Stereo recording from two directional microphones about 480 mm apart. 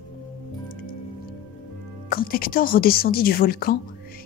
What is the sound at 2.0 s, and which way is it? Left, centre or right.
Speech, centre.